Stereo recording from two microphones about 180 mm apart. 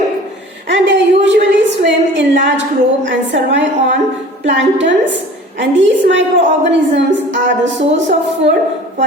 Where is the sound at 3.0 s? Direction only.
90° right.